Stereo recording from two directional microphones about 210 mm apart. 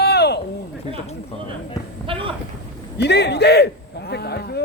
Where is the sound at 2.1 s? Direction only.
25° right (ahead or behind).